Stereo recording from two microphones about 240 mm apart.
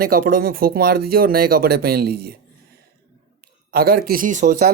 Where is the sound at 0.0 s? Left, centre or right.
Right.